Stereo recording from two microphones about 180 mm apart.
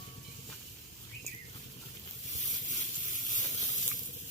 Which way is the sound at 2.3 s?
45° left (ahead or behind).